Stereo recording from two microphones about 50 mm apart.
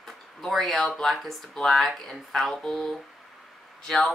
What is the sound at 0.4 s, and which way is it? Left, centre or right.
Speech, centre.